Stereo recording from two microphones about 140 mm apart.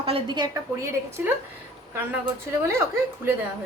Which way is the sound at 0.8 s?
20° right (ahead or behind).